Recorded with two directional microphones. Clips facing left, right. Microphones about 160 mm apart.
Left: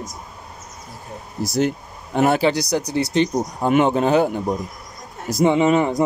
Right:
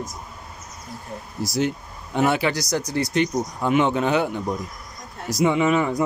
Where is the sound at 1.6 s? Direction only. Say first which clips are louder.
Left 3 dB; 45° left (ahead or behind).